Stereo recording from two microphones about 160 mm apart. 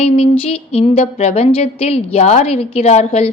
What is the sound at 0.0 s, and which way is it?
Speech, 40° left (ahead or behind).